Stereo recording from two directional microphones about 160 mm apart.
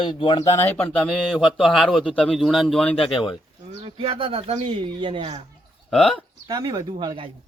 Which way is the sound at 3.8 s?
35° right (ahead or behind).